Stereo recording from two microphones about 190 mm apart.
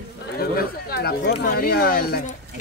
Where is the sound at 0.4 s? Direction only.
55° left (ahead or behind).